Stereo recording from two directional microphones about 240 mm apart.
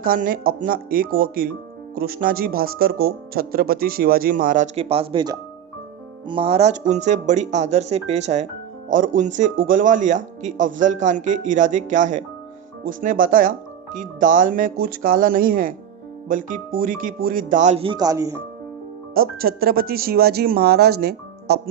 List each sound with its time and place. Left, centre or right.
0.0 s speech: right; by 18.4 s centre
19.1 s speech: right